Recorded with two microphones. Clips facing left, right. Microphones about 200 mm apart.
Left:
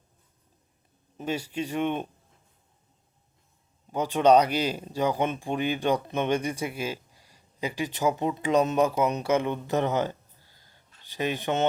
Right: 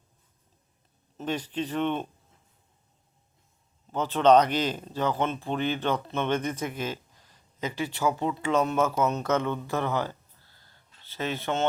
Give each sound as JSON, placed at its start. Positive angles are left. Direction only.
{"t": 1.1, "sound": "speech", "side_deg": 10}
{"t": 3.9, "sound": "speech", "side_deg": 10}